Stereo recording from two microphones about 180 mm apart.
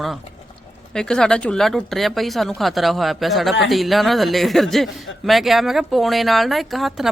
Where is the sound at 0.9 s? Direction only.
5° left (ahead or behind).